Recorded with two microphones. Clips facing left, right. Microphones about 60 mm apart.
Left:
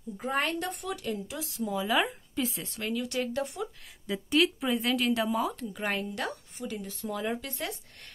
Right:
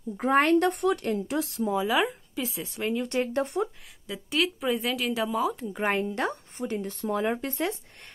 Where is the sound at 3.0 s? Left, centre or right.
Right.